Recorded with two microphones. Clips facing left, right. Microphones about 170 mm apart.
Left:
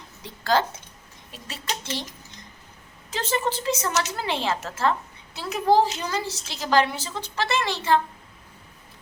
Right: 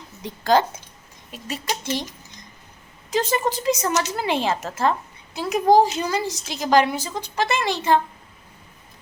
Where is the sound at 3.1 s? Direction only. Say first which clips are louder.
Right 4 dB; 15° right (ahead or behind).